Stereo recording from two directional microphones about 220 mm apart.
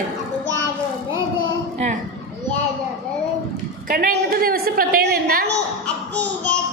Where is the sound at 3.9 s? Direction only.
40° right (ahead or behind).